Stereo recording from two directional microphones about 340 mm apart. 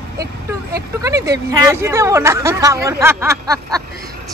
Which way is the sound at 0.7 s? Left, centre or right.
Centre.